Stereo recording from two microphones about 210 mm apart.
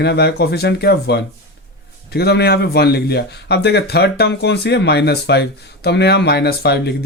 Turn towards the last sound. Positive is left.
turn(degrees=50)  # may be behind; listen again after turning